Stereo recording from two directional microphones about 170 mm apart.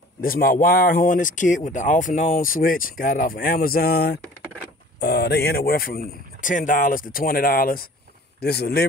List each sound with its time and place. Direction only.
0.2 s speech: 60° left (ahead or behind)
5.0 s speech: 75° left (ahead or behind); by 7.9 s 60° left (ahead or behind)
8.4 s speech: 70° left (ahead or behind)